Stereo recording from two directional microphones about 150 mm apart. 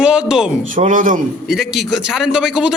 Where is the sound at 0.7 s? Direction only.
60° right (ahead or behind).